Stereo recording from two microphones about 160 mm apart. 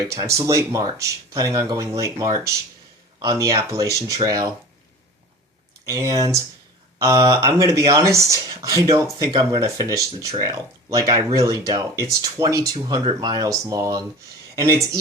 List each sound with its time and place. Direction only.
0.1 s speech: 20° right (ahead or behind)
5.8 s speech: 20° right (ahead or behind)